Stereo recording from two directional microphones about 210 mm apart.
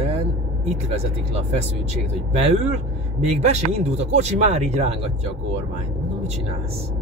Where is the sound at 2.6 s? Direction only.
30° right (ahead or behind).